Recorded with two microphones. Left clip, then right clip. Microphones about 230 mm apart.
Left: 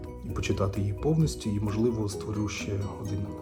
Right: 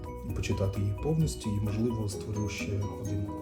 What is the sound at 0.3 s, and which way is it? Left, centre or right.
Speech, centre.